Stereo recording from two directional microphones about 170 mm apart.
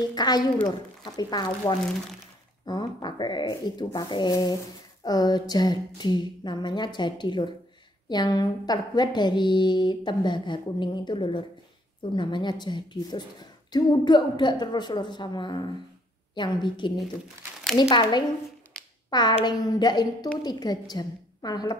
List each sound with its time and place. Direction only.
0.1 s a woman's voice: 25° left (ahead or behind)